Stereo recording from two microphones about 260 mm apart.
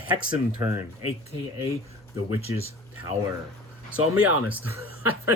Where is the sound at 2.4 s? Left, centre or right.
Left.